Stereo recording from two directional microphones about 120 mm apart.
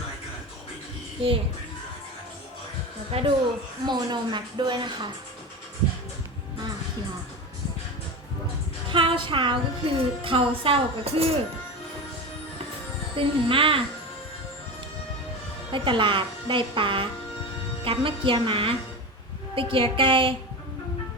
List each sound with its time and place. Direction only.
1.2 s a woman's voice: 50° right (ahead or behind)
3.1 s a woman's voice: 55° right (ahead or behind)
3.8 s speech: 40° right (ahead or behind)
8.9 s a woman's voice: 45° right (ahead or behind)
13.1 s a woman's voice: 50° right (ahead or behind)
15.7 s a woman's voice: 45° right (ahead or behind)